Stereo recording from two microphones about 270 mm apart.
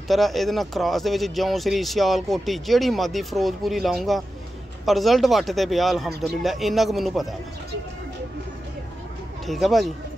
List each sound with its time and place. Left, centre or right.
0.1 s speech: centre
9.5 s speech: centre